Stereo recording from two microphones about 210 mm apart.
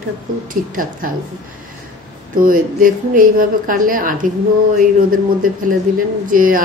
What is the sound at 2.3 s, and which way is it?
A woman's voice, 40° right (ahead or behind).